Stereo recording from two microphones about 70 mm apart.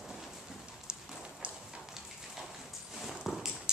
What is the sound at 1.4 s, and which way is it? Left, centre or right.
Clip-clop, centre.